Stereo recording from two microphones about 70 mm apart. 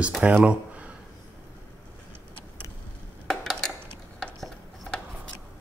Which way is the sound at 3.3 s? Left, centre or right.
Centre.